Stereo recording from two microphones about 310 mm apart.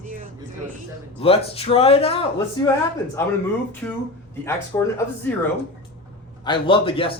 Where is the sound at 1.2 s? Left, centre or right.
Centre.